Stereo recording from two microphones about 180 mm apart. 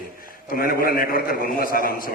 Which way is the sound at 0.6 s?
55° left (ahead or behind).